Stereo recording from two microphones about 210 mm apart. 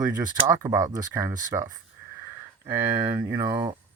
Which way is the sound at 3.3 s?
15° right (ahead or behind).